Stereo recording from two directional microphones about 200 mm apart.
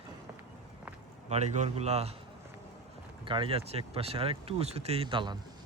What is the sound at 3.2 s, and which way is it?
Speech, 25° right (ahead or behind).